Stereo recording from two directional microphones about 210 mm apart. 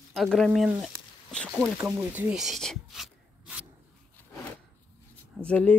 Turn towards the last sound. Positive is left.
turn(degrees=5)  # may be behind; listen again after turning